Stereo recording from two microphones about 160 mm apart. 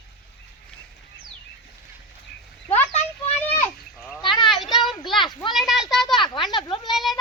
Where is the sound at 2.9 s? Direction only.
40° left (ahead or behind).